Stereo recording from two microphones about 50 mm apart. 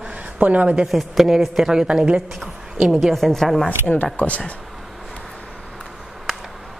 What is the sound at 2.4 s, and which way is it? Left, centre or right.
Speech, centre.